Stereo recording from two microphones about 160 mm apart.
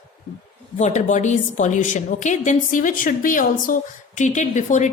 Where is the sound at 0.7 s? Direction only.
45° left (ahead or behind).